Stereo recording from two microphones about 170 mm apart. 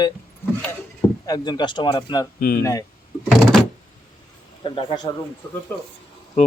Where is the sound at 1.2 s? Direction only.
25° left (ahead or behind).